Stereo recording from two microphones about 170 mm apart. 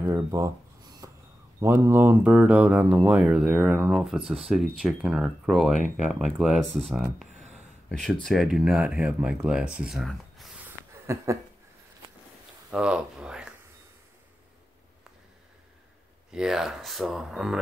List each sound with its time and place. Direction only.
0.0 s a sound: 20° right (ahead or behind)
1.6 s speech: 15° right (ahead or behind)
11.1 s speech: 15° right (ahead or behind)
12.7 s speech: 5° right (ahead or behind)
16.3 s speech: 5° right (ahead or behind)